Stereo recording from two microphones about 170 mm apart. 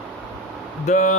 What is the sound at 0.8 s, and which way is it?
Speech, 45° left (ahead or behind).